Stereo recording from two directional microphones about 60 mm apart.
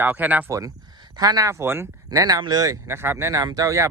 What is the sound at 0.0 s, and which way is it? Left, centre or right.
Speech, right.